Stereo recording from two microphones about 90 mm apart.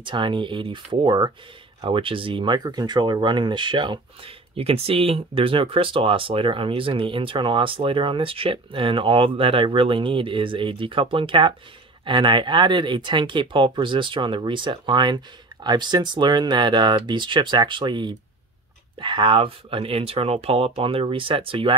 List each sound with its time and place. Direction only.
0.0 s speech: 65° right (ahead or behind)
1.8 s speech: 75° right (ahead or behind)
12.0 s speech: 65° right (ahead or behind); by 21.7 s 80° right